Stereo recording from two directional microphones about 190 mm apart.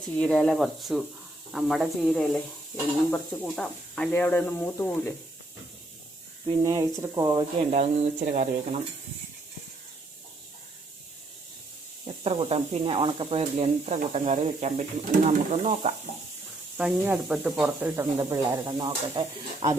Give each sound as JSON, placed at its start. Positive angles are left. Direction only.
{"t": 0.0, "sound": "speech", "side_deg": 5}
{"t": 6.6, "sound": "speech", "side_deg": -15}
{"t": 7.7, "sound": "speech", "side_deg": -40}
{"t": 12.0, "sound": "speech", "side_deg": -30}
{"t": 16.7, "sound": "speech", "side_deg": -5}
{"t": 18.7, "sound": "speech", "side_deg": -25}